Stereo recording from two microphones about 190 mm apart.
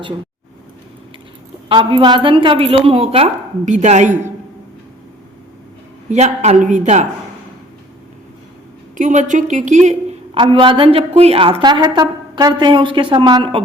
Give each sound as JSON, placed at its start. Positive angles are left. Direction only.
{"t": 1.7, "sound": "a woman's voice", "side_deg": -25}
{"t": 6.1, "sound": "a woman's voice", "side_deg": -35}
{"t": 9.0, "sound": "a woman's voice", "side_deg": -40}
{"t": 10.3, "sound": "a woman's voice", "side_deg": -25}